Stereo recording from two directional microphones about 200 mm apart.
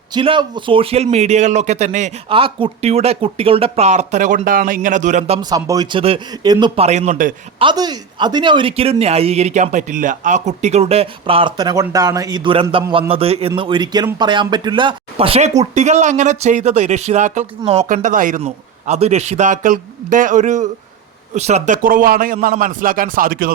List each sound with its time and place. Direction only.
0.1 s a man's voice: 25° right (ahead or behind)
5.4 s speech: 20° right (ahead or behind); by 7.3 s 40° right (ahead or behind)
7.6 s a man's voice: 20° right (ahead or behind); by 23.6 s 45° right (ahead or behind)